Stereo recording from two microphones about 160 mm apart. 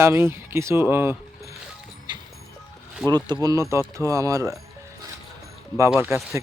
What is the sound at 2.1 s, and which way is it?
Vehicle, 30° right (ahead or behind).